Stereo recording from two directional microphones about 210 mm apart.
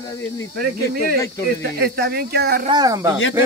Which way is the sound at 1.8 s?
50° right (ahead or behind).